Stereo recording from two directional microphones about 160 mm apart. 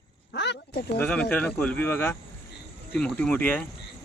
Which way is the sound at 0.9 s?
10° left (ahead or behind).